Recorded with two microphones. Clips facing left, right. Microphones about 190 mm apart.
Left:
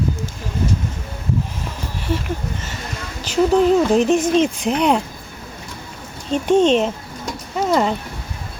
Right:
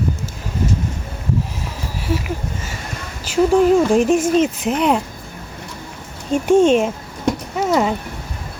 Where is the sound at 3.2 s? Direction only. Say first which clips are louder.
Right 1 dB; 10° right (ahead or behind).